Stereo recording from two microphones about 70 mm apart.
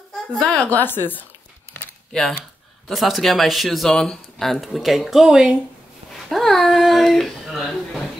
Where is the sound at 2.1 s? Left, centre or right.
Centre.